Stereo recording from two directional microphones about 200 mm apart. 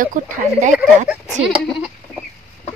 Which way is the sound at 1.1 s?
5° right (ahead or behind).